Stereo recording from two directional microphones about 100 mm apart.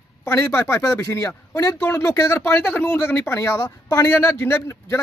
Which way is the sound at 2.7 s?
15° left (ahead or behind).